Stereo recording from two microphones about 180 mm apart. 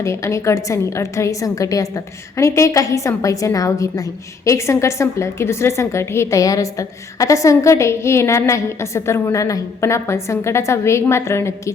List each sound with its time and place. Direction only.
0.0 s a woman's voice: 15° left (ahead or behind)